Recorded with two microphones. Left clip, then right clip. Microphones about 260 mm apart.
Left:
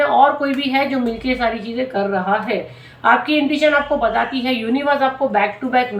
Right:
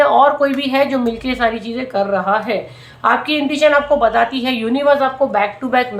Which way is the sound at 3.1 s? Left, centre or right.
Centre.